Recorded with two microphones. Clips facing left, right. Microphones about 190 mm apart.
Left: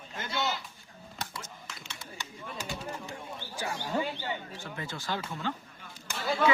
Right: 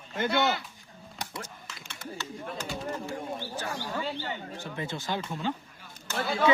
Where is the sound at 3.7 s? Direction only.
20° left (ahead or behind).